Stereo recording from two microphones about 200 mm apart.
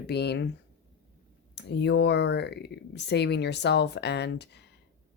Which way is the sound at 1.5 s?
60° left (ahead or behind).